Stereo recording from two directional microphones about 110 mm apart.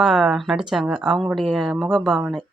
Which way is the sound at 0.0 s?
Centre (ahead or behind).